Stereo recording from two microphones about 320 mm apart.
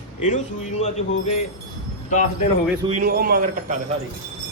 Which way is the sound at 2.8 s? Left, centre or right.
Right.